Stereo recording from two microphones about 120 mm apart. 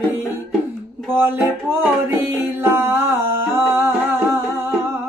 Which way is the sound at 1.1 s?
20° right (ahead or behind).